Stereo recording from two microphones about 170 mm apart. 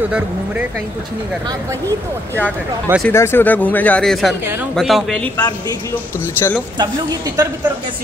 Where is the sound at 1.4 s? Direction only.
20° right (ahead or behind).